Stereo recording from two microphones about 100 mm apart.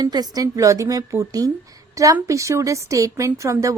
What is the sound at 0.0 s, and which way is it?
Speech, 40° right (ahead or behind).